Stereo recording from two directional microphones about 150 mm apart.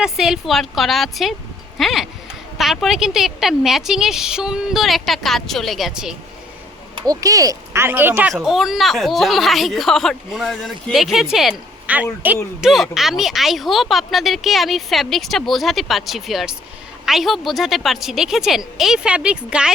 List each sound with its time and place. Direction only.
0.0 s speech: 5° right (ahead or behind)
7.0 s speech: 25° right (ahead or behind)
8.3 s speech: centre (ahead or behind)